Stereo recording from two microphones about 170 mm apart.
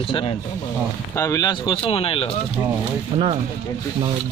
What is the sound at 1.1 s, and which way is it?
A man's voice, 15° left (ahead or behind).